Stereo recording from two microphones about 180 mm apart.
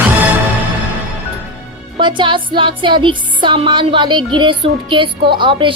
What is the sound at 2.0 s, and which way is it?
A woman's voice, 25° right (ahead or behind).